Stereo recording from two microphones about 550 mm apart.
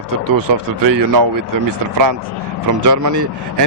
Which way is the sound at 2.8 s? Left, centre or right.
Right.